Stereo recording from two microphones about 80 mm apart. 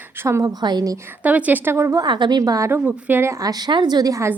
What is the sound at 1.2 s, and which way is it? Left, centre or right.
Speech, centre.